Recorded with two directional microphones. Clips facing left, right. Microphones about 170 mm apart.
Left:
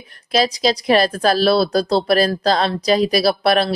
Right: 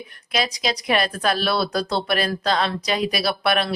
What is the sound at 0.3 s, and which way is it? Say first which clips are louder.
Speech: left 7 dB; 35° left (ahead or behind).